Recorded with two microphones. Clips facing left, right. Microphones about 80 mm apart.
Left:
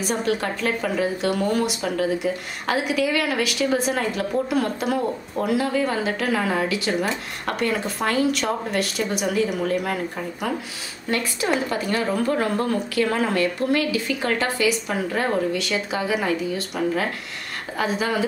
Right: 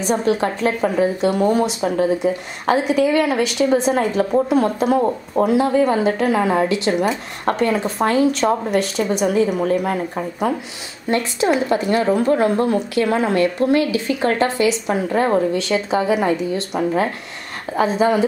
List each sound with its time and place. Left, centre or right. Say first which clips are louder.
0.0 s a woman's voice: right 5 dB; right